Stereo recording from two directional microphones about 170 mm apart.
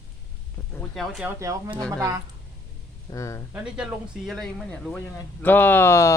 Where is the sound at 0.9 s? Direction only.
Centre (ahead or behind).